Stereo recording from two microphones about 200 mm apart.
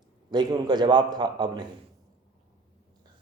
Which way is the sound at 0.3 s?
20° right (ahead or behind).